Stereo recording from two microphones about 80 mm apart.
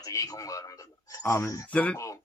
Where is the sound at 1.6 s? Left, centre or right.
Centre.